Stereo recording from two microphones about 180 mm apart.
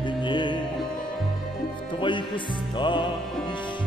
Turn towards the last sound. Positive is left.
turn(degrees=25)  # may be behind; listen again after turning